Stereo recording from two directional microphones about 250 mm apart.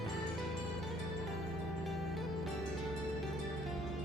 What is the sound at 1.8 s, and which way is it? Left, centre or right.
Music, centre.